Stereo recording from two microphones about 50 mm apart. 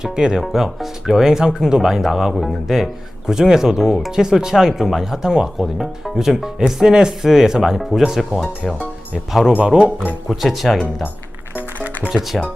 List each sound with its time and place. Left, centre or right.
0.0 s speech: centre
9.6 s speech: right
10.2 s speech: centre
12.1 s speech: centre